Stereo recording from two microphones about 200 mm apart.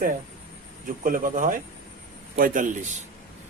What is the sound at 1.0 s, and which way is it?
A man's voice, 40° right (ahead or behind).